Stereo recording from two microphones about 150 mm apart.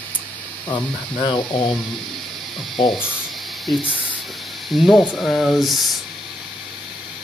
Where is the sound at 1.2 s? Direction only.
30° left (ahead or behind).